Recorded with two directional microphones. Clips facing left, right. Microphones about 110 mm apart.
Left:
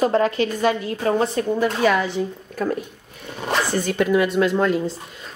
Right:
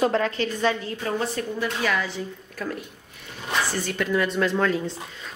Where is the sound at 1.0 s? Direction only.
40° left (ahead or behind).